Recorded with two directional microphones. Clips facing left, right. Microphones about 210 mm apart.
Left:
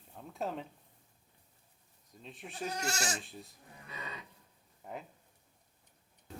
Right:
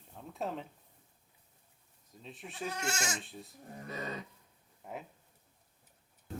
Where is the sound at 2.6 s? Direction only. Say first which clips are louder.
Even; 35° left (ahead or behind).